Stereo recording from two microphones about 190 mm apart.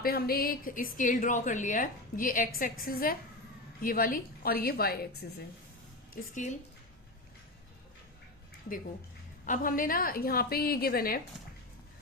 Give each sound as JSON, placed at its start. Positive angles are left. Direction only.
{"t": 0.0, "sound": "a woman's voice", "side_deg": 50}
{"t": 6.3, "sound": "speech", "side_deg": 40}
{"t": 9.5, "sound": "a woman's voice", "side_deg": 45}